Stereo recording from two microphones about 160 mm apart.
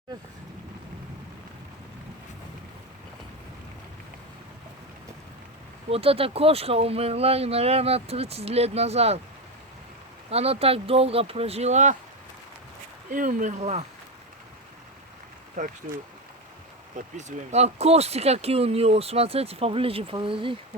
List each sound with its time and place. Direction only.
5.9 s speech: 35° right (ahead or behind)
10.2 s speech: 40° right (ahead or behind)
13.1 s speech: 60° right (ahead or behind)
15.6 s speech: 50° right (ahead or behind)
17.2 s speech: 45° right (ahead or behind)